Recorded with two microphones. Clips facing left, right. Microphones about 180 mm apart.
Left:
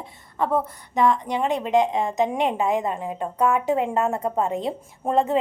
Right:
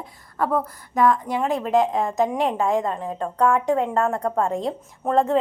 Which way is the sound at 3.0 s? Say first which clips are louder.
Right 1 dB; 15° left (ahead or behind).